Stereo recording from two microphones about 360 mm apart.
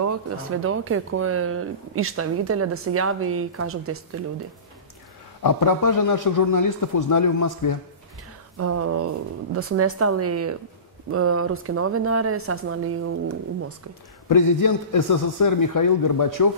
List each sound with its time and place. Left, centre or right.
0.0 s speech: right
5.4 s a man's voice: left
8.5 s speech: right
14.3 s a man's voice: left